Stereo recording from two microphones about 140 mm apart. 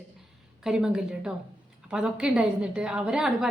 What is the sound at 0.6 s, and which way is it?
A woman's voice, 5° right (ahead or behind).